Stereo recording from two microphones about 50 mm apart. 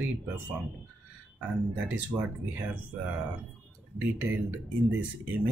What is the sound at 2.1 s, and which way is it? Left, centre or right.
Speech, right.